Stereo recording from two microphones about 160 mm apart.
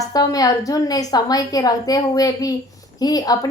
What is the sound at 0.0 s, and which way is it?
A woman's voice, 20° left (ahead or behind).